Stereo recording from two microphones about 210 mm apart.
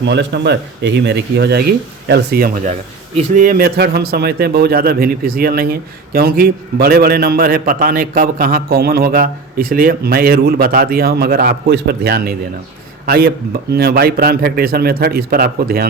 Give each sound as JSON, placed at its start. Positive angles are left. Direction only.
{"t": 0.0, "sound": "a man's voice", "side_deg": -55}